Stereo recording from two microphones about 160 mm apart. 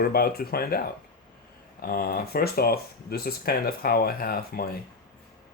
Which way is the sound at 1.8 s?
65° left (ahead or behind).